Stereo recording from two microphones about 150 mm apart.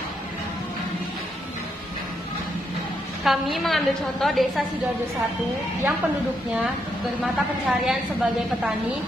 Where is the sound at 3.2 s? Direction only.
Centre (ahead or behind).